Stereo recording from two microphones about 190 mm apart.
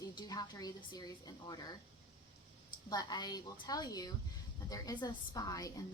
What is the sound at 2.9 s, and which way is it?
A woman's voice, 20° left (ahead or behind).